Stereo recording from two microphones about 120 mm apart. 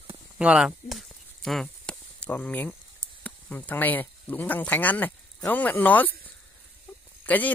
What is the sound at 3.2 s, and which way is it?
Speech, 15° left (ahead or behind).